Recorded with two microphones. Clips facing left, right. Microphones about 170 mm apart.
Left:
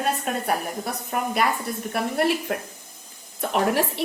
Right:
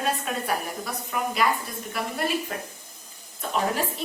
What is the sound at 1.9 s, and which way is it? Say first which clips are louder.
Speech: left 6 dB; 65° left (ahead or behind).